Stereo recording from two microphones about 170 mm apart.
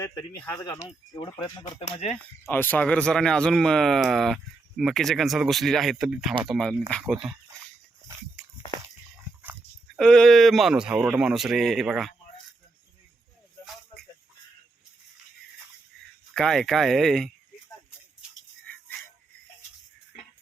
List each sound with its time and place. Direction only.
0.0 s speech: 20° left (ahead or behind)
2.5 s speech: 10° left (ahead or behind)
9.4 s dog: 10° right (ahead or behind)
10.0 s speech: 5° left (ahead or behind)
16.3 s speech: 5° left (ahead or behind)
18.6 s a sound: 10° left (ahead or behind)